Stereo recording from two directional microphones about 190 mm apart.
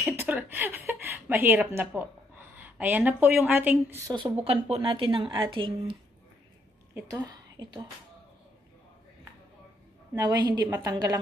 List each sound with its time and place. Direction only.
0.2 s a woman's voice: 10° right (ahead or behind)
4.5 s a woman's voice: 30° right (ahead or behind)
6.9 s a woman's voice: 15° right (ahead or behind)
10.1 s a woman's voice: 20° right (ahead or behind)